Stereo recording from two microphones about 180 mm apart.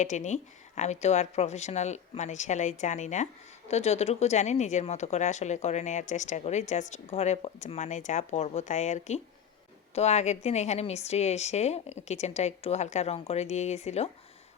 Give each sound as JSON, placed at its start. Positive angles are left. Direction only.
{"t": 0.0, "sound": "a woman's voice", "side_deg": 40}